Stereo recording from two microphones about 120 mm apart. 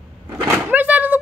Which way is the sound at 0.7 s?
15° right (ahead or behind).